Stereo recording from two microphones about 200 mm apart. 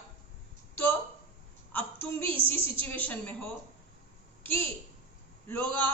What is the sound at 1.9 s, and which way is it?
Speech, 25° right (ahead or behind).